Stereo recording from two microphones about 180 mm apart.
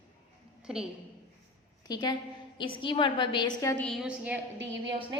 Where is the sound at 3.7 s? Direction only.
5° left (ahead or behind).